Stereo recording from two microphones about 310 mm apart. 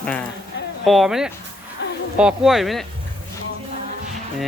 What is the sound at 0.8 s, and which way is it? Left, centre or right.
Speech, centre.